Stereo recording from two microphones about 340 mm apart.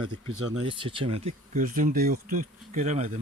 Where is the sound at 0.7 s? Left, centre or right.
Centre.